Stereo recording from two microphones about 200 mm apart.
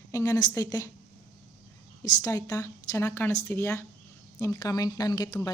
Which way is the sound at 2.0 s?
15° left (ahead or behind).